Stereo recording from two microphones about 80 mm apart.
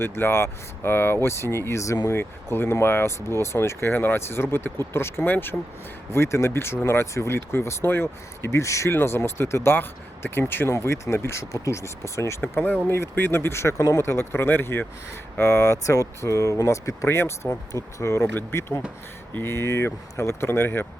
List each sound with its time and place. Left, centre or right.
0.0 s speech: left
12.4 s speech: left